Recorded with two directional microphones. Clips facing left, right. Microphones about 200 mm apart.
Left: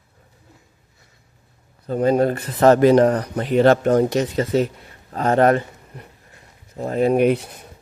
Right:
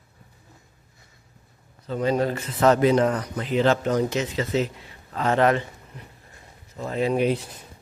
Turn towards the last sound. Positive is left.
turn(degrees=60)  # may be behind; listen again after turning